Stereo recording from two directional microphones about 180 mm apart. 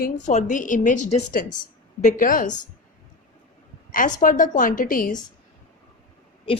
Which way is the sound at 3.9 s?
45° left (ahead or behind).